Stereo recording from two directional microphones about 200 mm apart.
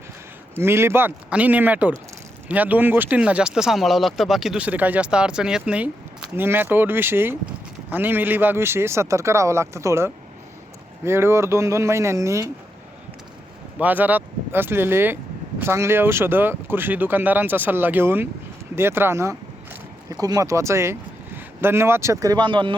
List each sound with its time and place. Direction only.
0.5 s speech: 10° right (ahead or behind)
13.7 s speech: 10° right (ahead or behind); by 22.7 s 25° right (ahead or behind)